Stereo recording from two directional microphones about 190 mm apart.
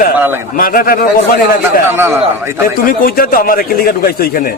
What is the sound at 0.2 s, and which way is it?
Speech, 10° right (ahead or behind).